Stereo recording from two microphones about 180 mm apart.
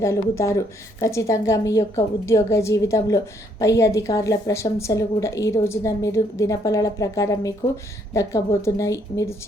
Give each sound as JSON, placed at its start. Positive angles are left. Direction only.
{"t": 0.0, "sound": "a woman's voice", "side_deg": 15}